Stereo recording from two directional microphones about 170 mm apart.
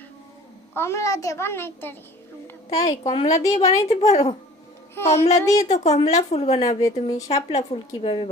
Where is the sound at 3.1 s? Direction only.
40° left (ahead or behind).